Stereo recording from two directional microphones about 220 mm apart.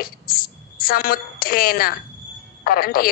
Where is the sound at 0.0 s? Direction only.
40° left (ahead or behind).